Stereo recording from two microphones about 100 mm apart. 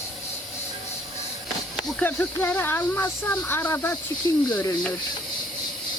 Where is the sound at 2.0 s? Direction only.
20° left (ahead or behind).